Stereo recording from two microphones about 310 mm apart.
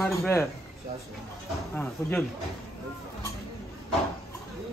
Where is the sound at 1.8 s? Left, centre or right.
Centre.